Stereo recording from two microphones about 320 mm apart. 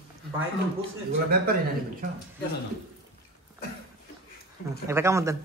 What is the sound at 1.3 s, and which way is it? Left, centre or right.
Speech, right.